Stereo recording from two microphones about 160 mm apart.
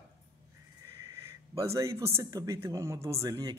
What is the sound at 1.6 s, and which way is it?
A man's voice, 20° right (ahead or behind).